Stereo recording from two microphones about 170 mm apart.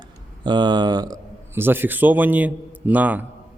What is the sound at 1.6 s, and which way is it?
A man's voice, 10° right (ahead or behind).